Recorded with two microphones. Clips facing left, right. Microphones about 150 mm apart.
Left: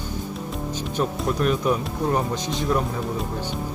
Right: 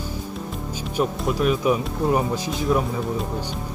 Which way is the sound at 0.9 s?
5° right (ahead or behind).